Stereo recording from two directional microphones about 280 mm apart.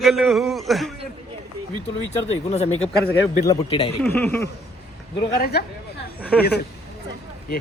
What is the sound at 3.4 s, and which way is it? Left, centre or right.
Speech, centre.